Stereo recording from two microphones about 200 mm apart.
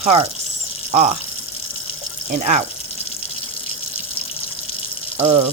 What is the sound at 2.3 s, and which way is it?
Speech, 35° right (ahead or behind).